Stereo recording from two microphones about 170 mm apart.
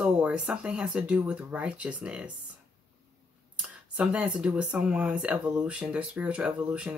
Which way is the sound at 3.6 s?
5° right (ahead or behind).